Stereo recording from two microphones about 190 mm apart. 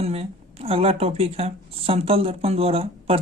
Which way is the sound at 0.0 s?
30° right (ahead or behind).